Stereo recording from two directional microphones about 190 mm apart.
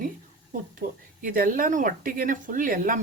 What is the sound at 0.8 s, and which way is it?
Speech, 45° right (ahead or behind).